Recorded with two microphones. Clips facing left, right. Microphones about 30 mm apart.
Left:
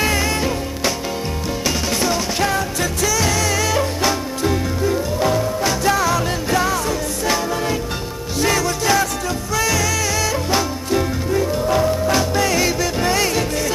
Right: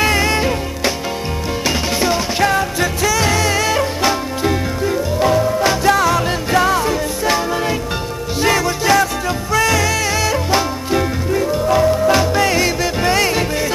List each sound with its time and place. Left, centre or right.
0.0 s music: right
2.0 s music: right
12.2 s music: right